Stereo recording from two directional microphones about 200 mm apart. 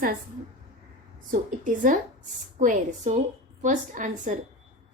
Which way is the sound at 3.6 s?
40° right (ahead or behind).